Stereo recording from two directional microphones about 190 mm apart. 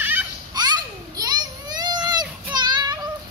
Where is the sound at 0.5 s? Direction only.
20° right (ahead or behind).